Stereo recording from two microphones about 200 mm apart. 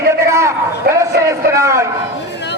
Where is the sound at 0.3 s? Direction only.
15° right (ahead or behind).